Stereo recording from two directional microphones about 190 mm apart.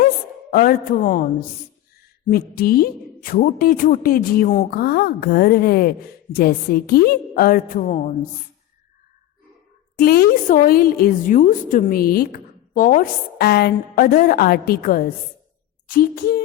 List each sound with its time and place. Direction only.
0.5 s a woman's voice: 50° left (ahead or behind)
10.0 s a woman's voice: 50° left (ahead or behind)